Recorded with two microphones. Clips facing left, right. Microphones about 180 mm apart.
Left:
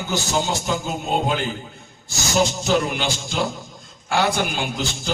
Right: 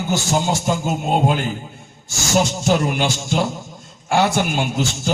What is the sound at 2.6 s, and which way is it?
A man's voice, 50° right (ahead or behind).